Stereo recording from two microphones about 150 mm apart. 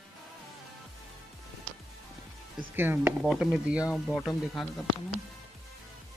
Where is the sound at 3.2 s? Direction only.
Centre (ahead or behind).